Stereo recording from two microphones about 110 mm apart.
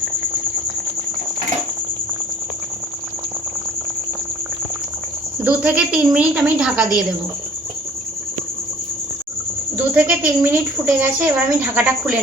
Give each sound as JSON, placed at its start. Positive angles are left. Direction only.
{"t": 5.4, "sound": "a woman's voice", "side_deg": -10}
{"t": 9.7, "sound": "a woman's voice", "side_deg": -15}